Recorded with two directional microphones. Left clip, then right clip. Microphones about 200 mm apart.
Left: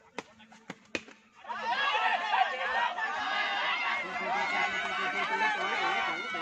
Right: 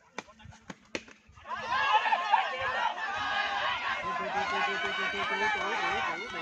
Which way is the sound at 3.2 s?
10° right (ahead or behind).